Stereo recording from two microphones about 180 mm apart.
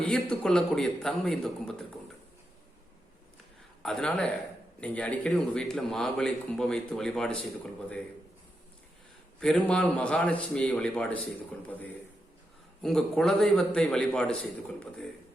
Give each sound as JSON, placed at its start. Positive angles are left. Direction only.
{"t": 0.0, "sound": "a man's voice", "side_deg": 5}
{"t": 3.8, "sound": "a man's voice", "side_deg": 5}
{"t": 9.4, "sound": "a man's voice", "side_deg": 5}